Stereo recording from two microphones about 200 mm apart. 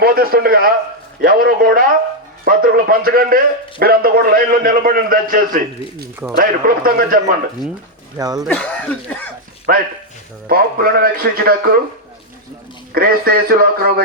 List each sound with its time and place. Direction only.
0.0 s a man's voice: 50° right (ahead or behind)
8.2 s speech: 20° right (ahead or behind)
8.4 s speech: 10° left (ahead or behind)
9.7 s a man's voice: 45° right (ahead or behind)
12.9 s a man's voice: 45° right (ahead or behind)